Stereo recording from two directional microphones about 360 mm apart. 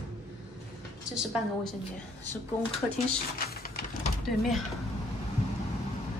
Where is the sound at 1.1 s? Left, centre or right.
Centre.